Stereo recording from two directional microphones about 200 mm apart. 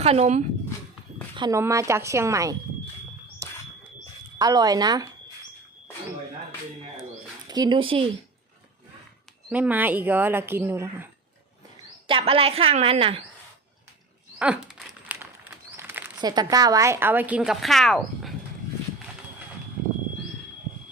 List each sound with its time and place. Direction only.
0.0 s speech: 30° right (ahead or behind)
1.4 s speech: 15° right (ahead or behind)
3.4 s bird: 15° right (ahead or behind)
4.4 s a woman's voice: 20° right (ahead or behind)
7.4 s speech: 20° right (ahead or behind)
9.5 s speech: 10° right (ahead or behind)
12.0 s a woman's voice: 25° right (ahead or behind)
14.3 s dog: 5° right (ahead or behind)
15.0 s a sound: 5° right (ahead or behind)
16.2 s speech: 20° right (ahead or behind); by 18.3 s centre (ahead or behind)